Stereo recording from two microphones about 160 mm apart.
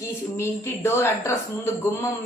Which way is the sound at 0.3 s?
15° left (ahead or behind).